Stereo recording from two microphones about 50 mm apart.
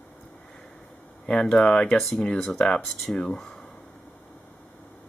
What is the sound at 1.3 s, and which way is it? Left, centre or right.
Speech, centre.